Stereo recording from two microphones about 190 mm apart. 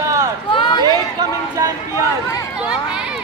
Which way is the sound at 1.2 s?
20° right (ahead or behind).